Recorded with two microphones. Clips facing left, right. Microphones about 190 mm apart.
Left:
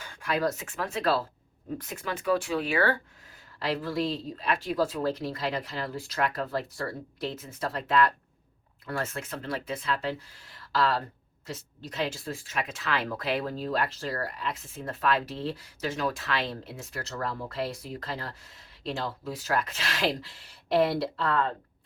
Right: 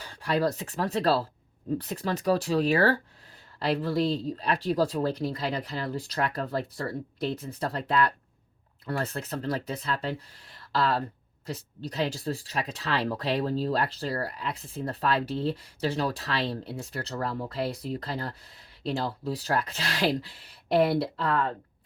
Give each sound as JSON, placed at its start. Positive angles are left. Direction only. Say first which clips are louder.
{"t": 0.0, "sound": "speech", "louder": "right 2 dB", "side_deg": -35}